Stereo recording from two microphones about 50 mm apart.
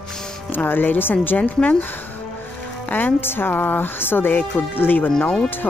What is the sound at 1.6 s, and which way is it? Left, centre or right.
Speech, left.